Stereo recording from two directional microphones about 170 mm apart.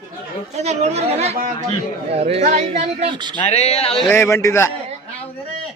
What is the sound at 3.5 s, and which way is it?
Speech, 40° left (ahead or behind).